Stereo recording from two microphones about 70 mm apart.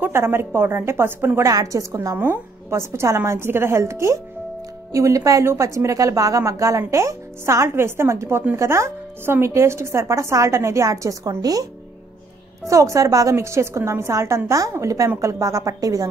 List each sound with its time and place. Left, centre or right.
0.0 s a woman's voice: right
1.5 s speech: right
2.1 s a woman's voice: right
12.6 s speech: right